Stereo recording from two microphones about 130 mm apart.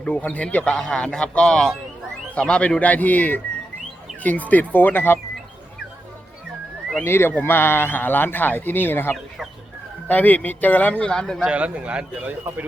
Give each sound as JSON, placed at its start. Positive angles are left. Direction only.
{"t": 0.0, "sound": "speech", "side_deg": 10}
{"t": 7.0, "sound": "speech", "side_deg": 20}
{"t": 11.4, "sound": "speech", "side_deg": -10}